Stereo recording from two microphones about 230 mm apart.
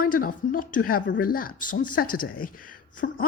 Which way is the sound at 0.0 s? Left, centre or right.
Left.